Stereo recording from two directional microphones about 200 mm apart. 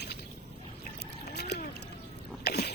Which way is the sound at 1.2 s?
55° left (ahead or behind).